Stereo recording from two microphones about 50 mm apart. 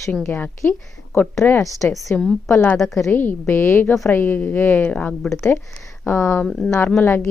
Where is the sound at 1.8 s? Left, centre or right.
Left.